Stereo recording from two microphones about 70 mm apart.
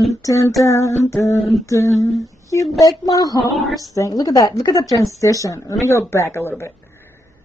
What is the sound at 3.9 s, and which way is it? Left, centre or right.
A woman's voice, left.